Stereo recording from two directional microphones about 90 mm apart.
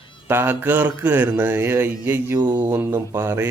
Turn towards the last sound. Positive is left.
turn(degrees=-30)  # may be behind; listen again after turning